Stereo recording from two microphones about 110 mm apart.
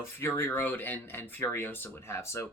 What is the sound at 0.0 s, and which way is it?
Speech, 25° left (ahead or behind).